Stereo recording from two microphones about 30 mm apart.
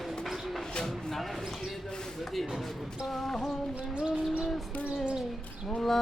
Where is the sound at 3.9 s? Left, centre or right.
Right.